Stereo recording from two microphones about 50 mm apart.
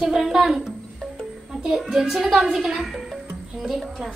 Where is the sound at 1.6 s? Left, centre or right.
Centre.